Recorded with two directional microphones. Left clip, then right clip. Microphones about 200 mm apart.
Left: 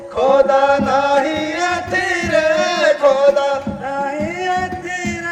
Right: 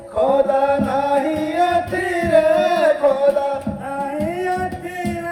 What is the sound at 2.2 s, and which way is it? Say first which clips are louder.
Music: right 3 dB; 50° right (ahead or behind).